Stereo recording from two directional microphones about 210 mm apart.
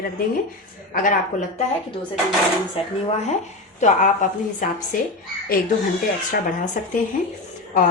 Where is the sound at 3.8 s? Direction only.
35° left (ahead or behind).